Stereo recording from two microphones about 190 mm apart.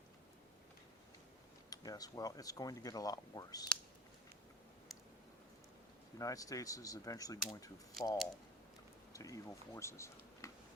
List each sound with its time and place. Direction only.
1.7 s speech: 20° left (ahead or behind)
6.1 s speech: 20° left (ahead or behind)
9.1 s speech: 15° left (ahead or behind)